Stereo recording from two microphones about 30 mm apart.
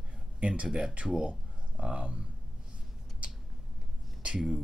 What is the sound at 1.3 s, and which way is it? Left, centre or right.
Speech, right.